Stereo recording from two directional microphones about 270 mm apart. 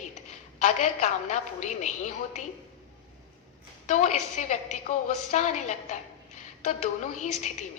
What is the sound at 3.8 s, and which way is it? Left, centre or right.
A woman's voice, left.